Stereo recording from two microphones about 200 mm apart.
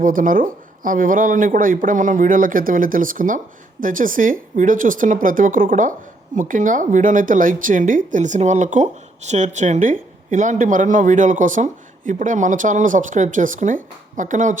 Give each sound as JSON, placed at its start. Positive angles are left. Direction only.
{"t": 0.0, "sound": "speech", "side_deg": -45}